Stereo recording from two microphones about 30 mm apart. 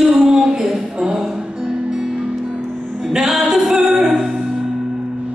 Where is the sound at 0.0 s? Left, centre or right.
Right.